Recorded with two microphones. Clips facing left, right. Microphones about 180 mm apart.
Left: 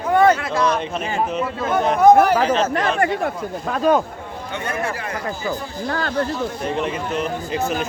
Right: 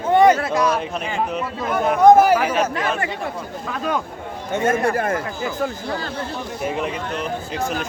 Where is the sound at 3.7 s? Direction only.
40° left (ahead or behind).